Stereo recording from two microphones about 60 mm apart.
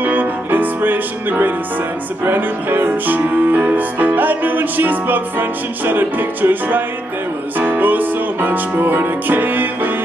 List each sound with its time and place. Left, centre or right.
0.0 s music: right